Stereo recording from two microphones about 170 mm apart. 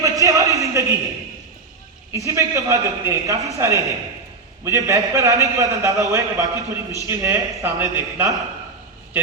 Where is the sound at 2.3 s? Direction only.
20° right (ahead or behind).